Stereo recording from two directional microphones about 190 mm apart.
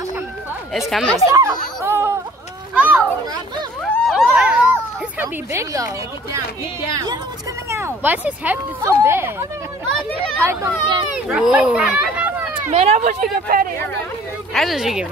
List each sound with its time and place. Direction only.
0.7 s speech: centre (ahead or behind)
1.3 s a sound: 15° right (ahead or behind)
2.7 s children playing: 10° right (ahead or behind)
3.9 s a sound: centre (ahead or behind)
5.2 s speech: 15° right (ahead or behind)
11.2 s speech: 5° right (ahead or behind)
12.7 s speech: 35° right (ahead or behind)
13.2 s speech: 50° right (ahead or behind)
14.5 s speech: centre (ahead or behind)